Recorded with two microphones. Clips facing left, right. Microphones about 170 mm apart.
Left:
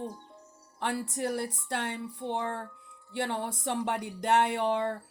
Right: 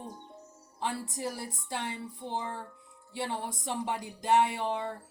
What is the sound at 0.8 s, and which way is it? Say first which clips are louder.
Speech: left 3 dB; 70° left (ahead or behind).